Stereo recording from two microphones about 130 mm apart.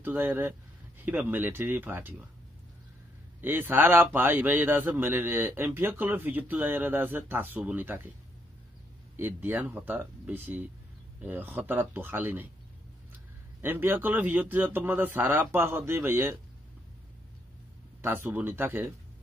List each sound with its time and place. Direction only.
0.0 s speech: 15° right (ahead or behind)
3.3 s speech: 15° right (ahead or behind)
9.1 s speech: 15° right (ahead or behind)
13.6 s speech: 15° right (ahead or behind)
18.0 s speech: 15° right (ahead or behind)